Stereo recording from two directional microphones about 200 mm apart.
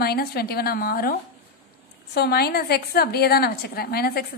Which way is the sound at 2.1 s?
55° left (ahead or behind).